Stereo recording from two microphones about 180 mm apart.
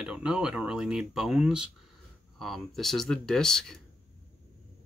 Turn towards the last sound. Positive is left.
turn(degrees=5)  # may be behind; listen again after turning